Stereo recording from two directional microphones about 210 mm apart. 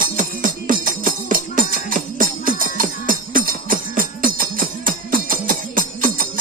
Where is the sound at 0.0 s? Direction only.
40° right (ahead or behind).